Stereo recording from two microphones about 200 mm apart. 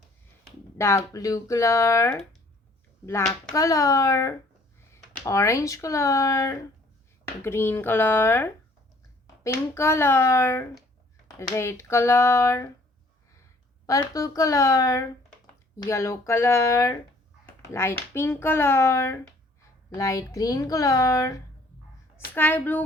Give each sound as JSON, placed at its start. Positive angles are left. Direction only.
{"t": 0.8, "sound": "speech", "side_deg": 15}
{"t": 3.5, "sound": "speech", "side_deg": 15}
{"t": 13.8, "sound": "speech", "side_deg": 15}
{"t": 22.4, "sound": "speech", "side_deg": 10}